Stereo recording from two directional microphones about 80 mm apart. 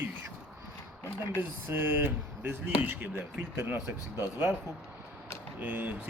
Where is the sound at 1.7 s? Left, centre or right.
Right.